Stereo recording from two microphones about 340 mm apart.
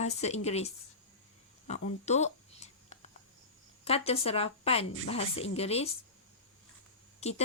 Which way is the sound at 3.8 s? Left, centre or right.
Centre.